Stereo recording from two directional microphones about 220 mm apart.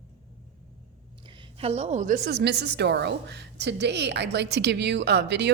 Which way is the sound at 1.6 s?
30° right (ahead or behind).